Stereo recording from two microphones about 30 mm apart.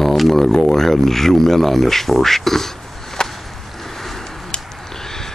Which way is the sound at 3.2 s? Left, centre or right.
Left.